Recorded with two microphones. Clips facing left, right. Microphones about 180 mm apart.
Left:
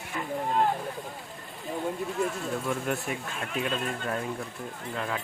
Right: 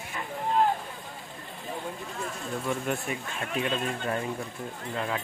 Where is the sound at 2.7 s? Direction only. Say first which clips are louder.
Right 2 dB; centre (ahead or behind).